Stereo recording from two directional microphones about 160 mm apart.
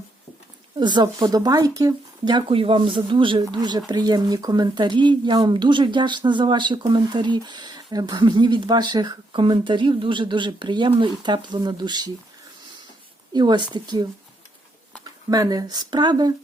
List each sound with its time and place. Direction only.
0.8 s speech: 30° right (ahead or behind)
13.3 s speech: 30° right (ahead or behind)
15.3 s speech: 25° right (ahead or behind)